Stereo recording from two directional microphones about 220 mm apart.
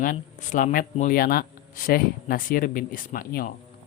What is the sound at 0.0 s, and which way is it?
Speech, 35° left (ahead or behind).